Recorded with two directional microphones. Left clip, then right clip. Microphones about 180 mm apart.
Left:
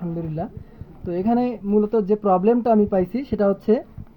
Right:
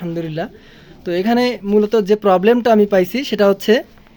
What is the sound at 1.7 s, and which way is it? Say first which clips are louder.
Speech: right 5 dB; 45° right (ahead or behind).